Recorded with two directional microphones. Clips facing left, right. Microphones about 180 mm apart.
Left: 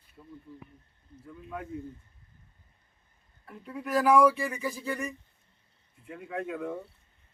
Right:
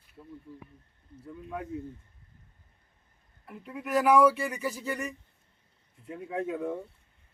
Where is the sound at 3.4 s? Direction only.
10° right (ahead or behind).